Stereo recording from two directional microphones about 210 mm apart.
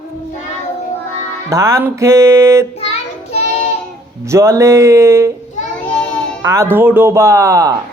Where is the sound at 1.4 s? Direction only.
15° right (ahead or behind).